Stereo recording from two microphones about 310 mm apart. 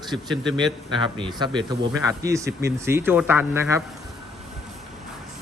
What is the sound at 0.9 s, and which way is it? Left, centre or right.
A man's voice, centre.